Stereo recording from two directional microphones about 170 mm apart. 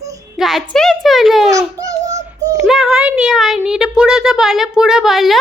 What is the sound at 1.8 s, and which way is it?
Child singing, 20° right (ahead or behind).